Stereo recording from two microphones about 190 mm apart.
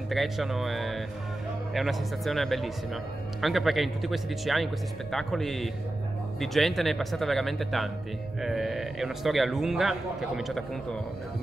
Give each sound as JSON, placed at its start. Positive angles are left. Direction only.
{"t": 0.1, "sound": "speech", "side_deg": 0}